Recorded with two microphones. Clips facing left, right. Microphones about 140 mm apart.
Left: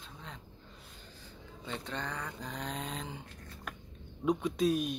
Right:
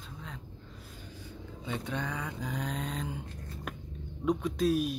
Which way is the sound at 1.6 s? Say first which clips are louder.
Right 4 dB; 10° right (ahead or behind).